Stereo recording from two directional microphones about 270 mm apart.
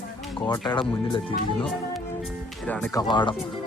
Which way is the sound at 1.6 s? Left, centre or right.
Centre.